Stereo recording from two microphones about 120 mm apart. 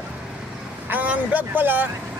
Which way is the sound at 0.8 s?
15° right (ahead or behind).